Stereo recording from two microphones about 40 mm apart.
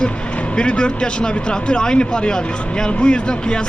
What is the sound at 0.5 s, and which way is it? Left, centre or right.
Speech, left.